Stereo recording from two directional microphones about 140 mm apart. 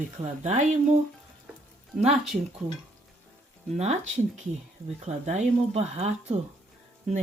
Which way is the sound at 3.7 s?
55° right (ahead or behind).